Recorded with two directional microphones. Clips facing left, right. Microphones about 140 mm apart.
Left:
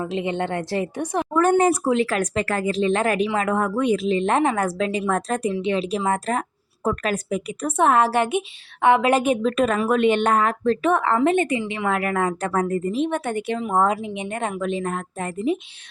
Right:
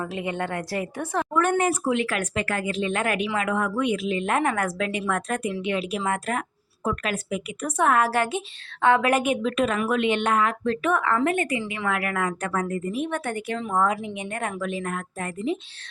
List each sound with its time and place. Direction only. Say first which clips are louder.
0.0 s a woman's voice: left 4 dB; 20° left (ahead or behind)
1.3 s speech: left 6 dB; 35° left (ahead or behind)
7.8 s a woman's voice: left 3 dB; 25° left (ahead or behind)